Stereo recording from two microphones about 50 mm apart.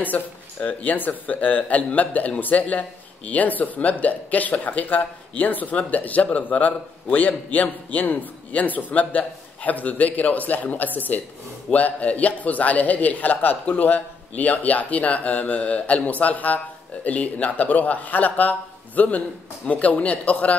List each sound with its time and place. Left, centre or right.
0.0 s speech: left